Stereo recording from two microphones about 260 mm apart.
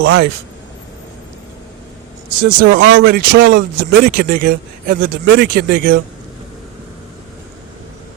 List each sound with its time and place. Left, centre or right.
0.0 s speech: right
2.4 s speech: right